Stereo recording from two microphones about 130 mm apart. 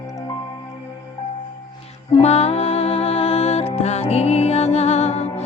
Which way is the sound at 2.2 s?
55° left (ahead or behind).